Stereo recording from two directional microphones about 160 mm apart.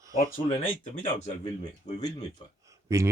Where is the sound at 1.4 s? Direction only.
25° left (ahead or behind).